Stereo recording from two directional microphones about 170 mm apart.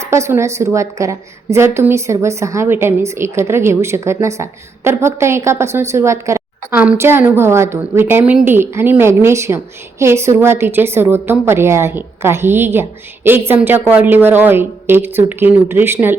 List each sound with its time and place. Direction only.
0.1 s a woman's voice: 15° right (ahead or behind)